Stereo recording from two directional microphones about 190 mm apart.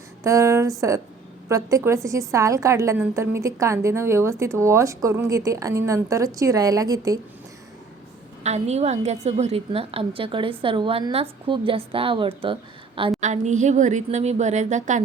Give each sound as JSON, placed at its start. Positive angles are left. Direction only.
{"t": 0.2, "sound": "a woman's voice", "side_deg": -15}
{"t": 8.4, "sound": "a woman's voice", "side_deg": -35}
{"t": 13.1, "sound": "speech", "side_deg": -40}